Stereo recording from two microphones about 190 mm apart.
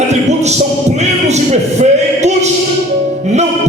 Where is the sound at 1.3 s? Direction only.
35° right (ahead or behind).